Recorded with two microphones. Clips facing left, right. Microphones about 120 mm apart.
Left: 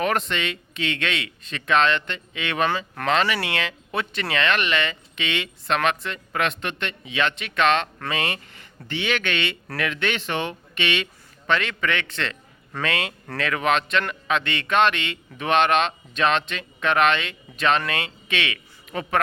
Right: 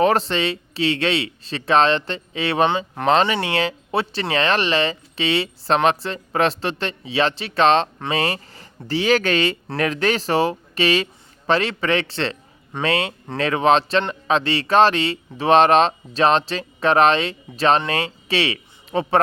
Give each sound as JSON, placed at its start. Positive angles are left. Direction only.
{"t": 0.0, "sound": "speech", "side_deg": -30}